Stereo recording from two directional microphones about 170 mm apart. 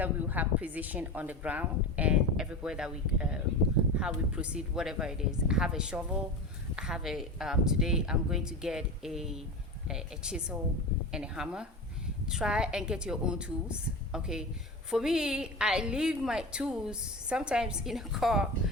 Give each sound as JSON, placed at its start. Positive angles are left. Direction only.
{"t": 0.0, "sound": "a woman's voice", "side_deg": -10}